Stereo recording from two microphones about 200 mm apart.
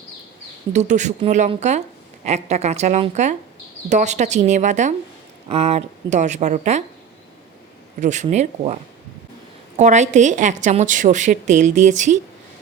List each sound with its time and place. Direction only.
0.7 s a woman's voice: 35° right (ahead or behind)
8.0 s a woman's voice: 35° right (ahead or behind)